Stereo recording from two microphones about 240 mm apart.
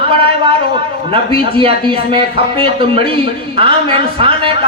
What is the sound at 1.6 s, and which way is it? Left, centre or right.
A man's voice, right.